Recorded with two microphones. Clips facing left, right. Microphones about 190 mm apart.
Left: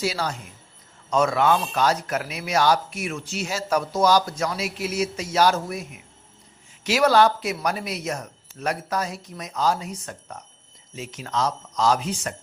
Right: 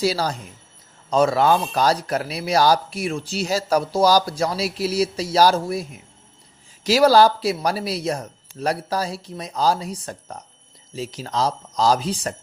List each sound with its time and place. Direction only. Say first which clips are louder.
0.0 s speech: right 5 dB; 35° right (ahead or behind)